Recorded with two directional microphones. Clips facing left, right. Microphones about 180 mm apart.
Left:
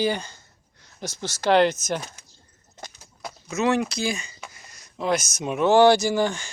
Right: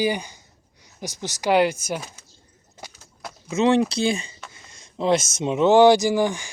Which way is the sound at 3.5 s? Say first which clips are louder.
Right 4 dB; 30° right (ahead or behind).